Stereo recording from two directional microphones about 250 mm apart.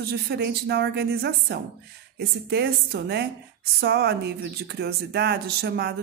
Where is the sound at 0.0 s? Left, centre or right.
Right.